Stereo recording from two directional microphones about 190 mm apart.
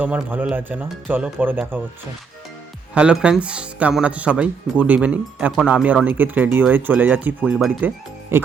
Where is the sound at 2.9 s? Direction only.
5° right (ahead or behind).